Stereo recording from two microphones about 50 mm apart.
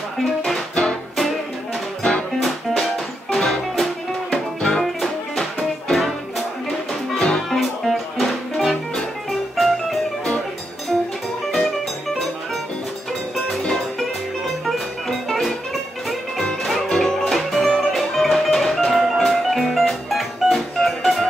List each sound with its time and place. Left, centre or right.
3.3 s music: centre
4.6 s music: centre
4.8 s music: centre
7.2 s music: centre
7.4 s music: centre
11.5 s music: centre
14.7 s music: centre
16.6 s music: centre